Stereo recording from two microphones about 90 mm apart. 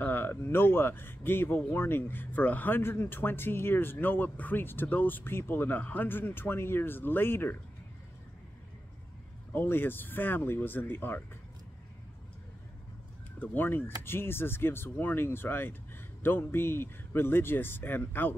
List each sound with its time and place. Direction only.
0.0 s speech: 25° left (ahead or behind)
9.5 s speech: 25° left (ahead or behind)
13.4 s speech: 20° left (ahead or behind)